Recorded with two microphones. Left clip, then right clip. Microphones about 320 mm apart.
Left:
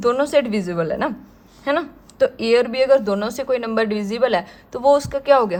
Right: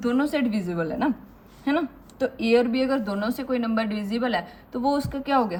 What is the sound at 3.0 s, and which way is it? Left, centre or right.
A woman's voice, left.